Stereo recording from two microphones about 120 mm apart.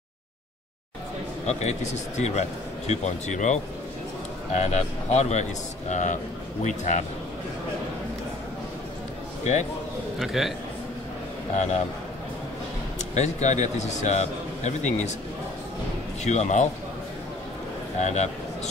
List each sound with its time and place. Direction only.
1.5 s a man's voice: 70° left (ahead or behind)
2.9 s speech: 85° left
4.6 s a man's voice: 65° left (ahead or behind); by 7.1 s 85° left
9.4 s a man's voice: 70° left (ahead or behind)
10.1 s a man's voice: centre (ahead or behind)
13.1 s a man's voice: 75° left (ahead or behind)
16.3 s speech: 80° left
18.0 s a man's voice: 70° left (ahead or behind)